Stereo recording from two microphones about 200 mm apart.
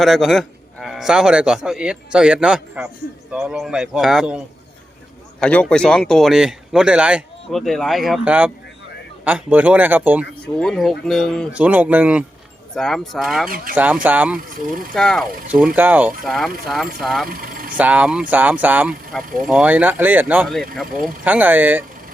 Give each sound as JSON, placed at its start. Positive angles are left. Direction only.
{"t": 0.0, "sound": "speech", "side_deg": 0}
{"t": 10.4, "sound": "speech", "side_deg": 5}
{"t": 17.2, "sound": "vehicle", "side_deg": -45}
{"t": 17.7, "sound": "speech", "side_deg": -5}